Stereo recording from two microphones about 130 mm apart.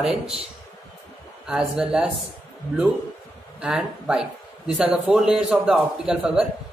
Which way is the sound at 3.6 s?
5° right (ahead or behind).